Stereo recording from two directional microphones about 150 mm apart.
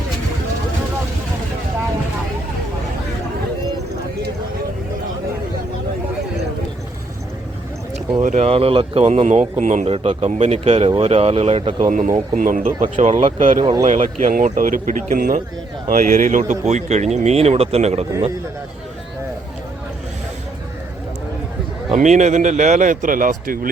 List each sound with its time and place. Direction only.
8.2 s speech: 50° right (ahead or behind)
9.2 s speech: 50° right (ahead or behind)
11.9 s a man's voice: 55° right (ahead or behind)
13.0 s speech: 50° right (ahead or behind)
14.3 s a man's voice: 70° right (ahead or behind); by 18.0 s 45° right (ahead or behind)
21.9 s a man's voice: 50° right (ahead or behind)